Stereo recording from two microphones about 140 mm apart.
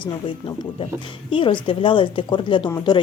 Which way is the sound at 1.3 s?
35° left (ahead or behind).